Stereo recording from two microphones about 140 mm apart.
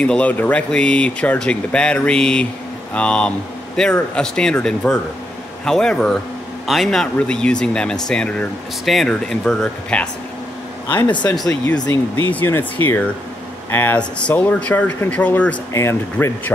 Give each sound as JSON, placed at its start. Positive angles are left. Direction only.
{"t": 0.0, "sound": "speech", "side_deg": 10}
{"t": 10.9, "sound": "speech", "side_deg": 35}
{"t": 11.8, "sound": "speech", "side_deg": 15}